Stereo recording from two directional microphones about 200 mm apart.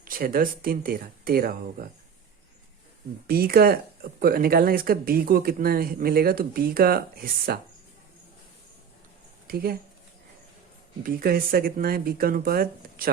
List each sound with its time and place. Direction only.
0.0 s speech: 45° right (ahead or behind)
3.2 s speech: 50° right (ahead or behind)
9.5 s speech: 50° right (ahead or behind)
11.0 s speech: 45° right (ahead or behind)